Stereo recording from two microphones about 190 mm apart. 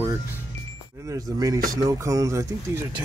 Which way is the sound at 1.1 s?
20° right (ahead or behind).